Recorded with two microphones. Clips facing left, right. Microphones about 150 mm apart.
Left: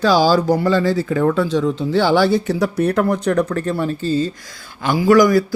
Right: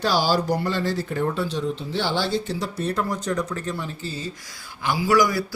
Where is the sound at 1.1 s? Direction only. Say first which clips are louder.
Left 8 dB; 90° left; by 4.0 s 65° left (ahead or behind).